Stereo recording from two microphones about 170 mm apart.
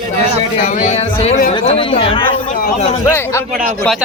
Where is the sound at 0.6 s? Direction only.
45° left (ahead or behind); by 2.5 s 30° left (ahead or behind).